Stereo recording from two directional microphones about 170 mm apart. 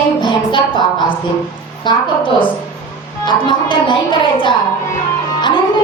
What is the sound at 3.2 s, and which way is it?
Speech, 30° left (ahead or behind).